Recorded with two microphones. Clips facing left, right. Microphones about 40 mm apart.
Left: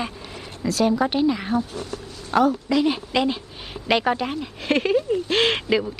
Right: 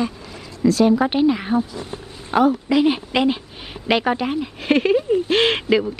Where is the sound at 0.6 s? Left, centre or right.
Centre.